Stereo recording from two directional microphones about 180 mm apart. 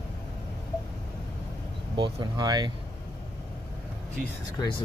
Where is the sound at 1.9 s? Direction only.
25° right (ahead or behind).